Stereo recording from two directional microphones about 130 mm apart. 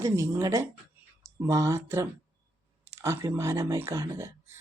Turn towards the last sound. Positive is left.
turn(degrees=-20)  # may be behind; listen again after turning